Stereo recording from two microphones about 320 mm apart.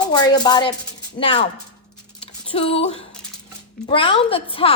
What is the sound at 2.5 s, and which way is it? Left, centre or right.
A woman's voice, centre.